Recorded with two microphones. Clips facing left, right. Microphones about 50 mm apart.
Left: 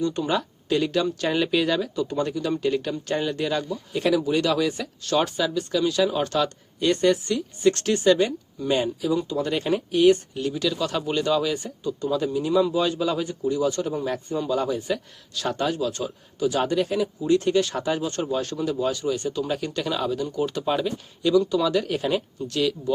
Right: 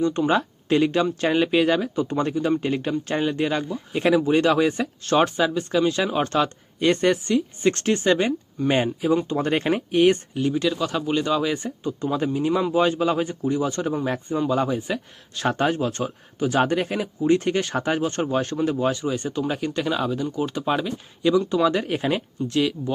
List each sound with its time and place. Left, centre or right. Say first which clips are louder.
0.0 s a man's voice: right 4 dB; right
10.3 s speech: right 3 dB; right
11.5 s a man's voice: right 1 dB; right